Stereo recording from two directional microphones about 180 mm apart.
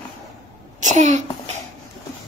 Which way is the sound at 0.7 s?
45° right (ahead or behind).